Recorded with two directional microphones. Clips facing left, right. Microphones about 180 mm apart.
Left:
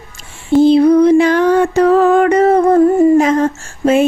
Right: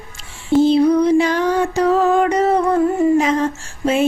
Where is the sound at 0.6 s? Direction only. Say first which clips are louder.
Left 6 dB; 55° left (ahead or behind).